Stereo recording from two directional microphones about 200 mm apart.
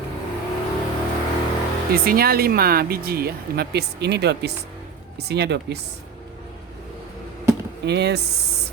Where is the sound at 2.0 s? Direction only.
50° right (ahead or behind).